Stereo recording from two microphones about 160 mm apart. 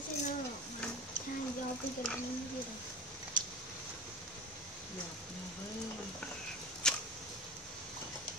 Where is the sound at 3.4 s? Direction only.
55° right (ahead or behind).